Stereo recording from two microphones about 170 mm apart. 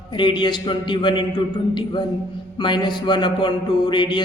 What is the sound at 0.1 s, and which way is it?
Speech, 30° left (ahead or behind).